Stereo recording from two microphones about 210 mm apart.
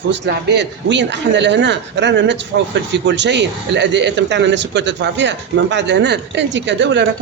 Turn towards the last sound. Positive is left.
turn(degrees=-55)  # may be behind; listen again after turning